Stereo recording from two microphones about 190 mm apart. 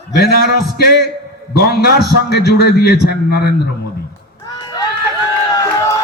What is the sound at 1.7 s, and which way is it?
A man's voice, 55° left (ahead or behind).